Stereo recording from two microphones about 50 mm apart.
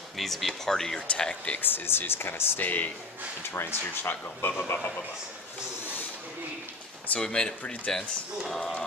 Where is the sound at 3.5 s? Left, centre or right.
Left.